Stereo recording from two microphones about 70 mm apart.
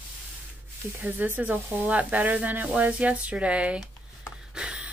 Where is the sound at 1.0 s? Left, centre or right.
Right.